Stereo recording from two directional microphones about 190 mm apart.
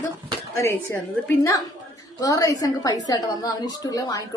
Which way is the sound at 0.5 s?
15° left (ahead or behind).